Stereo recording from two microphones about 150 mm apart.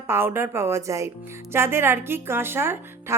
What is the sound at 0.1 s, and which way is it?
A woman's voice, 15° right (ahead or behind).